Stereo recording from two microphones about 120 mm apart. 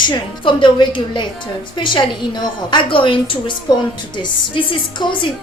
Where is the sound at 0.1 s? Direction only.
40° left (ahead or behind).